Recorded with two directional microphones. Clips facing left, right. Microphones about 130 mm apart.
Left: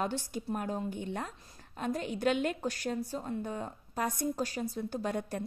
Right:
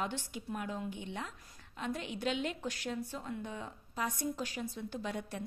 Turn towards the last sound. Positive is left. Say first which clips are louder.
# left 5 dB
turn(degrees=45)  # may be behind; listen again after turning